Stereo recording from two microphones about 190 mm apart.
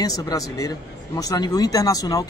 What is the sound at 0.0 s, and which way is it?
Speech, 20° left (ahead or behind).